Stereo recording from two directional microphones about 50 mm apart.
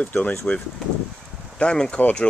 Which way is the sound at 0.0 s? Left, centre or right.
Left.